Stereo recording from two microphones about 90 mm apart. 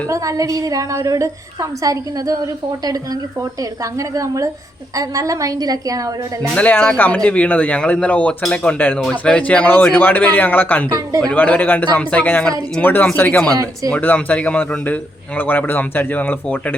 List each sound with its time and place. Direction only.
0.1 s a woman's voice: 40° right (ahead or behind)
6.6 s a man's voice: 15° left (ahead or behind)
12.8 s a man's voice: 20° left (ahead or behind)
13.5 s speech: 45° right (ahead or behind)
13.9 s a man's voice: 20° left (ahead or behind)